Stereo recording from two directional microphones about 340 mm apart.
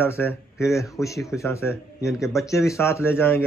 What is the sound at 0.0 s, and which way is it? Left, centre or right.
Speech, centre.